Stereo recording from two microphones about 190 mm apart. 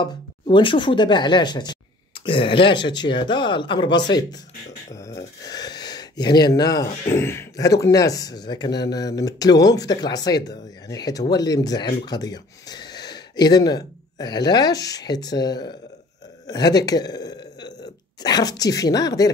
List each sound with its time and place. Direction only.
0.0 s speech: 25° left (ahead or behind)